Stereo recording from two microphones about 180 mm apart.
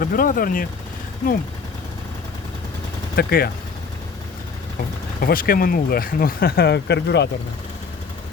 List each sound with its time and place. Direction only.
0.0 s speech: 50° left (ahead or behind)
3.2 s speech: 60° left (ahead or behind)
5.2 s speech: 55° left (ahead or behind)